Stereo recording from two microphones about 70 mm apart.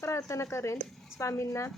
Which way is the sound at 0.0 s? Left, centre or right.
Left.